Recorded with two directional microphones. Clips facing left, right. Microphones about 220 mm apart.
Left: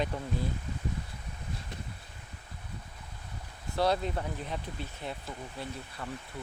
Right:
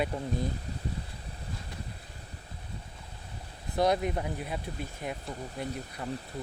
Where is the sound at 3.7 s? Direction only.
15° right (ahead or behind).